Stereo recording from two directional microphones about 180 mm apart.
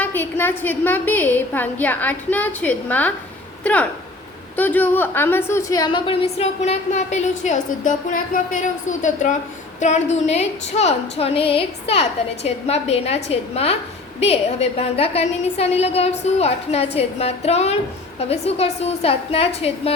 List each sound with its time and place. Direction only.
0.0 s a woman's voice: 10° left (ahead or behind); by 19.9 s 35° left (ahead or behind)